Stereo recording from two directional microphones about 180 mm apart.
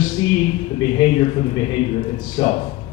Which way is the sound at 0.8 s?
30° left (ahead or behind).